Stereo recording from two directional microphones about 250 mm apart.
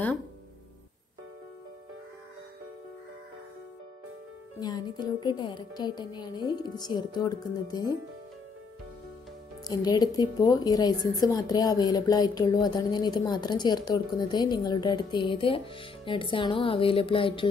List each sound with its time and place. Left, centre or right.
4.6 s a woman's voice: centre
9.7 s a woman's voice: centre